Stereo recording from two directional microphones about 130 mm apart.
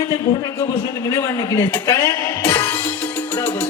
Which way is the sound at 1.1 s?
25° left (ahead or behind).